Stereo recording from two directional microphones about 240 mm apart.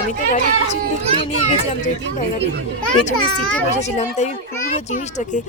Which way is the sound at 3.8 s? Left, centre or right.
Left.